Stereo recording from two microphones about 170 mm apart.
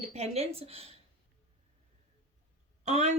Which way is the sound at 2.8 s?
40° right (ahead or behind).